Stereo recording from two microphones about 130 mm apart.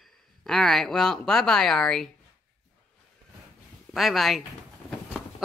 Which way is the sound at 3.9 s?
Centre (ahead or behind).